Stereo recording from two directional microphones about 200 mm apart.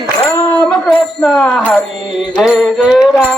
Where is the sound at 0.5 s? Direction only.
5° left (ahead or behind).